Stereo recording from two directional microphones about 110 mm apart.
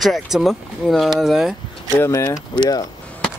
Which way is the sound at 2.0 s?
25° left (ahead or behind).